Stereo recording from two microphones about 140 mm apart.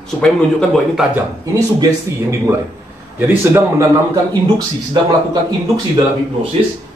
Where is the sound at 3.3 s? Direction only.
15° right (ahead or behind).